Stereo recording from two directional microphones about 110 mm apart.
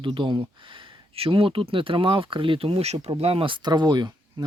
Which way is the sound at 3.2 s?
60° right (ahead or behind).